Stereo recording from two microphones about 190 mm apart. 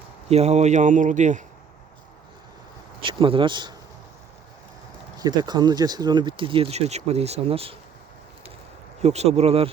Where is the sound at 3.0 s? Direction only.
25° right (ahead or behind).